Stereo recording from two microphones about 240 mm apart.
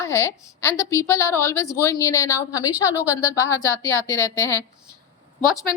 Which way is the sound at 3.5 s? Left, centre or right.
Centre.